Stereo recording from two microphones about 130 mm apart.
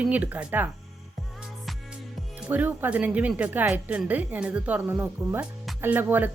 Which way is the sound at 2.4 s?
15° right (ahead or behind).